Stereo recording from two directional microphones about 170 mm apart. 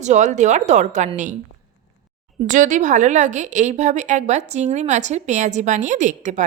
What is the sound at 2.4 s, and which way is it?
A woman's voice, 50° right (ahead or behind).